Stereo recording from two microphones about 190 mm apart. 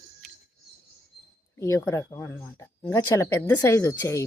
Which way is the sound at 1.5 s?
15° left (ahead or behind).